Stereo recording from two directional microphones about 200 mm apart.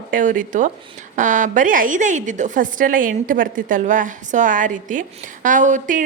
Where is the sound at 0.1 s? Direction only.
40° right (ahead or behind).